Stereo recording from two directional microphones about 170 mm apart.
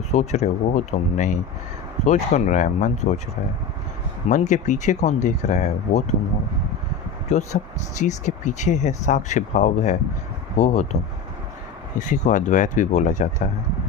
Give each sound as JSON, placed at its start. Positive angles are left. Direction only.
{"t": 0.1, "sound": "speech", "side_deg": 40}
{"t": 4.3, "sound": "speech", "side_deg": 45}
{"t": 7.3, "sound": "speech", "side_deg": 45}